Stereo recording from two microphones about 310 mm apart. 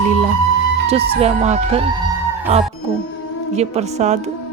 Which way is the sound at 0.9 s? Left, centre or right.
Centre.